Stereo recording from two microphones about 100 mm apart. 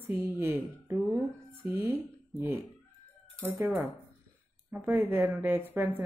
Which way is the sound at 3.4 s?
20° right (ahead or behind).